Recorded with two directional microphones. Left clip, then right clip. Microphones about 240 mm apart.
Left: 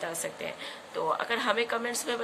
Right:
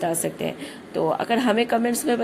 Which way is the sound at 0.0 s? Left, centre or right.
Centre.